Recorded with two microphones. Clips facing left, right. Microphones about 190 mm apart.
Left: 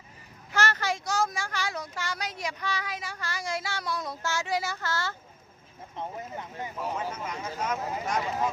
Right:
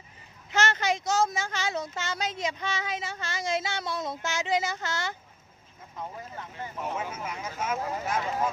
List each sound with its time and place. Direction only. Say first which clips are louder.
0.5 s speech: right 2 dB; 20° right (ahead or behind)
6.0 s speech: left 2 dB; 20° left (ahead or behind)
6.9 s speech: left 1 dB; 5° right (ahead or behind)